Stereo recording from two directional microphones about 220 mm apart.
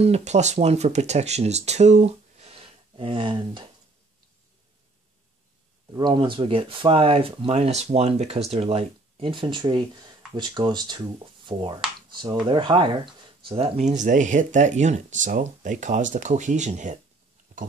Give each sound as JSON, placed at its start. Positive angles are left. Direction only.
{"t": 0.0, "sound": "speech", "side_deg": -30}
{"t": 5.9, "sound": "speech", "side_deg": -20}
{"t": 17.5, "sound": "a sound", "side_deg": -35}